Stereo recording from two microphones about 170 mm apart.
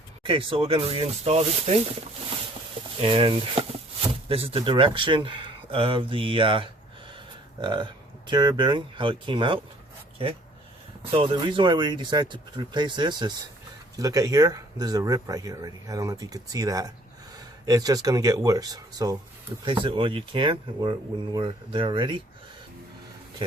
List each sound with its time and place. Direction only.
0.2 s speech: 30° right (ahead or behind)
3.0 s speech: 30° right (ahead or behind)
11.1 s speech: 30° right (ahead or behind)